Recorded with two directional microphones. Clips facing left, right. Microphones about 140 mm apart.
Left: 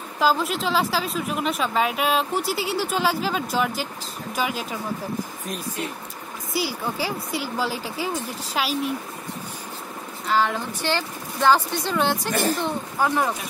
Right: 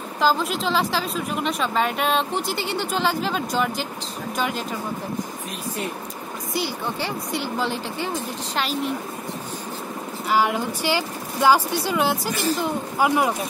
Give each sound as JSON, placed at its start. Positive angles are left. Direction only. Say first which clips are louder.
{"t": 0.2, "sound": "a woman's voice", "louder": "even", "side_deg": 0}
{"t": 6.5, "sound": "a woman's voice", "louder": "left 1 dB", "side_deg": 5}
{"t": 10.2, "sound": "a woman's voice", "louder": "right 1 dB", "side_deg": -10}
{"t": 12.3, "sound": "a woman's voice", "louder": "left 1 dB", "side_deg": 50}
{"t": 12.5, "sound": "a woman's voice", "louder": "right 2 dB", "side_deg": -10}